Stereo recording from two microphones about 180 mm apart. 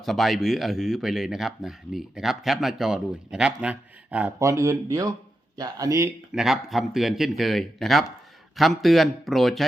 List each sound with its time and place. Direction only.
0.0 s speech: centre (ahead or behind); by 6.1 s 20° right (ahead or behind)
6.3 s speech: centre (ahead or behind)